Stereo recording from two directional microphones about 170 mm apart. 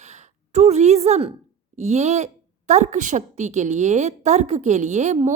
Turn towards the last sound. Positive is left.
turn(degrees=-45)  # may be behind; listen again after turning